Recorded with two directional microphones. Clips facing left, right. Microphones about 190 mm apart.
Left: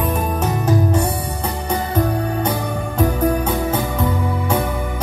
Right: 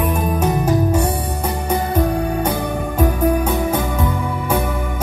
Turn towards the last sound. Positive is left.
turn(degrees=-10)  # may be behind; listen again after turning